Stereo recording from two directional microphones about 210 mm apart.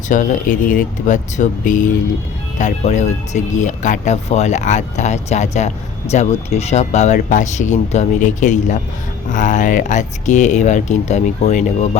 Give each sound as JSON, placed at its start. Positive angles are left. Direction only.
{"t": 0.1, "sound": "speech", "side_deg": 40}